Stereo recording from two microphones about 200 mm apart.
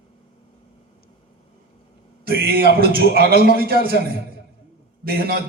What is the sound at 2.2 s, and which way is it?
A man's voice, 50° right (ahead or behind).